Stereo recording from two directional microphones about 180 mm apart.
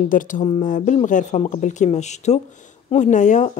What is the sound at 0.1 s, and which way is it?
Speech, 45° left (ahead or behind).